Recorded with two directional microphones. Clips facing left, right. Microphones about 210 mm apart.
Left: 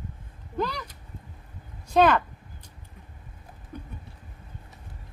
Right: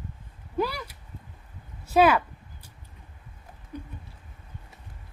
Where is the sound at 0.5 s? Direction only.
10° right (ahead or behind).